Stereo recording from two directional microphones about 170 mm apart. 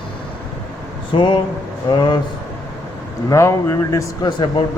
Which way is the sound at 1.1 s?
30° left (ahead or behind).